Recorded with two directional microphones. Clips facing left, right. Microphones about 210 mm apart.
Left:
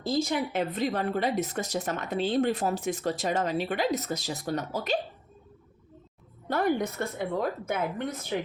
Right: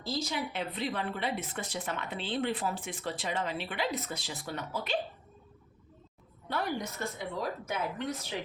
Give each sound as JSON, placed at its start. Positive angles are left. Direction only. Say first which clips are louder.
{"t": 0.0, "sound": "speech", "louder": "left 7 dB", "side_deg": 50}
{"t": 6.5, "sound": "a woman's voice", "louder": "left 8 dB", "side_deg": 50}